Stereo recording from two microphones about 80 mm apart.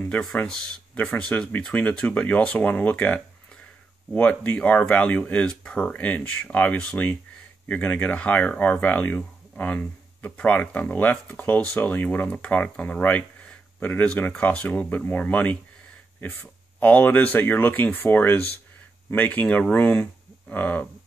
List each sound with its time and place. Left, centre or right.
0.9 s speech: centre
16.8 s speech: left